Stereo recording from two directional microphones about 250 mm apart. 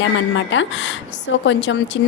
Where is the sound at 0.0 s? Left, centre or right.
Left.